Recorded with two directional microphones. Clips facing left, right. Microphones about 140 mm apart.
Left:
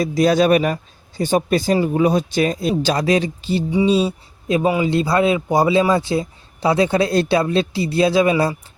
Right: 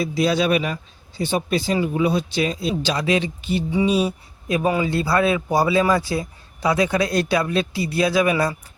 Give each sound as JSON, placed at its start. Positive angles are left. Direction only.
{"t": 0.0, "sound": "a man's voice", "side_deg": 45}